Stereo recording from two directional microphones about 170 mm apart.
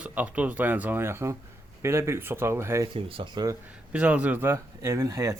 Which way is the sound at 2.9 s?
30° right (ahead or behind).